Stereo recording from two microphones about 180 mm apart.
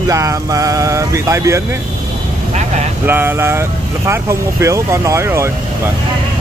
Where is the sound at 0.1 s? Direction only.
20° right (ahead or behind).